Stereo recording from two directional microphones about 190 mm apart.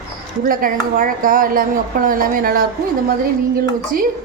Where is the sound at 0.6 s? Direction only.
45° right (ahead or behind).